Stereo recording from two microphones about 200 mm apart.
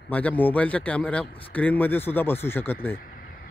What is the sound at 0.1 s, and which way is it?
Speech, 5° left (ahead or behind).